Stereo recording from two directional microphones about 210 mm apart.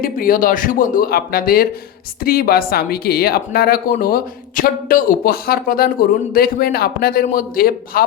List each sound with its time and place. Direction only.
0.0 s a woman's voice: 40° left (ahead or behind)